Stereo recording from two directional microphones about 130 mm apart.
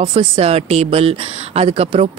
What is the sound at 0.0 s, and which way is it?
Speech, 45° right (ahead or behind).